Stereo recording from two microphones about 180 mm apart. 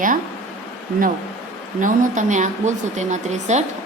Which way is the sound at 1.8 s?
45° right (ahead or behind).